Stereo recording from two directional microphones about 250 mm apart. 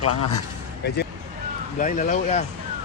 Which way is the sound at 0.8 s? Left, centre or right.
Left.